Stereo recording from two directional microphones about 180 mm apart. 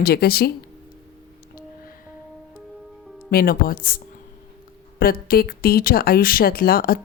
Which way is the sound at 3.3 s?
55° left (ahead or behind).